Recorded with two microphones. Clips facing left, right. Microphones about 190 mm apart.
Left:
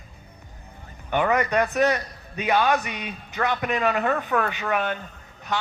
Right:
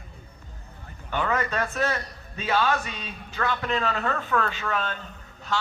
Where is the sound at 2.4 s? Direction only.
15° left (ahead or behind).